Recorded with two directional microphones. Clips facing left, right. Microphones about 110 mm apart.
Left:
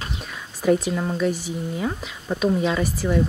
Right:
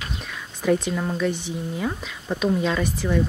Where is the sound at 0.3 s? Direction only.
5° left (ahead or behind).